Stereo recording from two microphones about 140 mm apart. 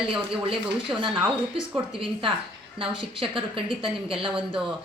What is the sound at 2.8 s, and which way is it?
A woman's voice, 40° right (ahead or behind).